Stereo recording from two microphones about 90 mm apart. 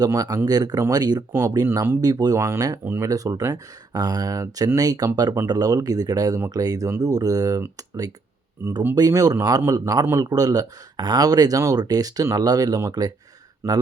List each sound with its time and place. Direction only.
0.1 s speech: 45° right (ahead or behind)
1.3 s speech: 30° right (ahead or behind)
8.6 s speech: 25° right (ahead or behind)
9.0 s speech: 45° right (ahead or behind)
13.6 s speech: 25° right (ahead or behind)